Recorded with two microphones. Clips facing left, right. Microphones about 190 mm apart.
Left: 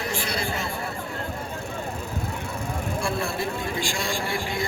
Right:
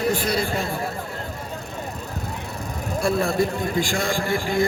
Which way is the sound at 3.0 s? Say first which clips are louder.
Right 9 dB; 40° right (ahead or behind).